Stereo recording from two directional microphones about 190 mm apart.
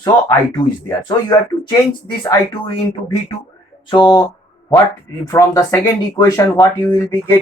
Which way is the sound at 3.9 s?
25° left (ahead or behind).